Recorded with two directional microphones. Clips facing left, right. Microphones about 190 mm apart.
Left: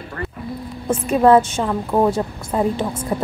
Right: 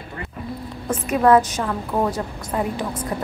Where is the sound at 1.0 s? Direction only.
30° left (ahead or behind).